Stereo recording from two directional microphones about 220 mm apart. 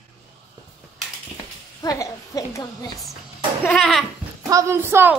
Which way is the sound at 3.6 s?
Centre (ahead or behind).